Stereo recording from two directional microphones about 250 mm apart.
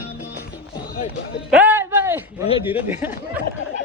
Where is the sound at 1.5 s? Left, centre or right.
Centre.